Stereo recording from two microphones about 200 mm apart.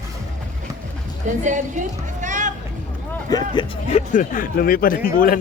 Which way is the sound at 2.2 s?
40° right (ahead or behind).